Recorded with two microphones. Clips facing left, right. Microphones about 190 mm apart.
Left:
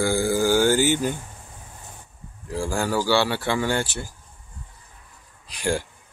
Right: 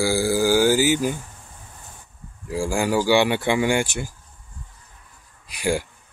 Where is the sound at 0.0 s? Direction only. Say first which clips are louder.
Right 1 dB; 5° right (ahead or behind).